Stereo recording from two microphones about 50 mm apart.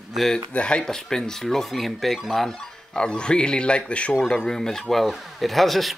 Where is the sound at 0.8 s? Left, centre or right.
Centre.